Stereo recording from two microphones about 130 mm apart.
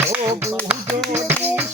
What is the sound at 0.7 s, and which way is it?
Speech, 10° right (ahead or behind).